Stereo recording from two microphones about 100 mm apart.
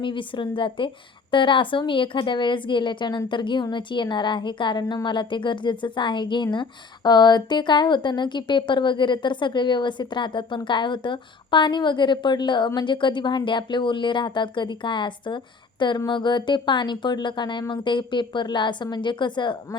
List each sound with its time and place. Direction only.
0.0 s speech: 55° left (ahead or behind)